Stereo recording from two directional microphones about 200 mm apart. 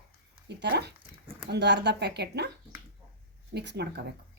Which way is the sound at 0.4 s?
55° right (ahead or behind).